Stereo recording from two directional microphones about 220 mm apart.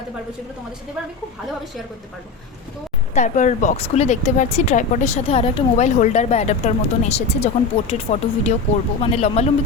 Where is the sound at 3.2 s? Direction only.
35° left (ahead or behind).